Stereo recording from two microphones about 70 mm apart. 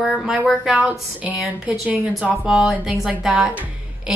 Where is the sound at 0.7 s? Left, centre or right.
Centre.